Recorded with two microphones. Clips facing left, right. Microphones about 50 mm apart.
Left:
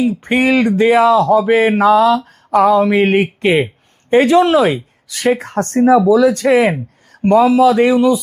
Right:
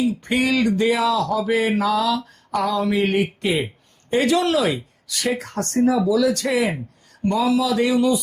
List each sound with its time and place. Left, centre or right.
0.3 s speech: left
4.1 s speech: left
6.5 s speech: left